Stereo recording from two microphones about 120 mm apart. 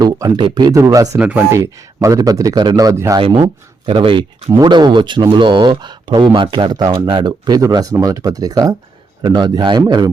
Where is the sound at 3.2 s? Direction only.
45° right (ahead or behind).